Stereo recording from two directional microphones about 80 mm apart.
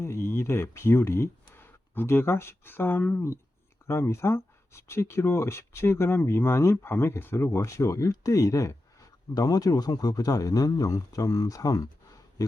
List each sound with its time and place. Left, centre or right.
0.0 s speech: left
3.8 s speech: left